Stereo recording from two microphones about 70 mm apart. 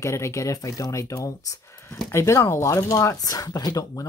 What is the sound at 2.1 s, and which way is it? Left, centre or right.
Speech, left.